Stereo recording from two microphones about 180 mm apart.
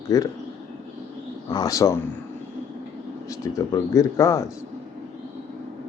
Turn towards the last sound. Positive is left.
turn(degrees=20)  # may be behind; listen again after turning